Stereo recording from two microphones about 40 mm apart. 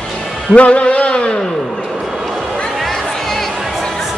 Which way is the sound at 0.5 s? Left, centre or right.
Left.